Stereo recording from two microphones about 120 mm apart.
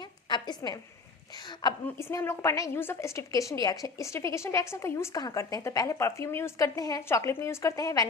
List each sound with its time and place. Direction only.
0.0 s a sound: 40° left (ahead or behind)
1.6 s a woman's voice: 35° left (ahead or behind)
2.0 s a woman's voice: 20° left (ahead or behind)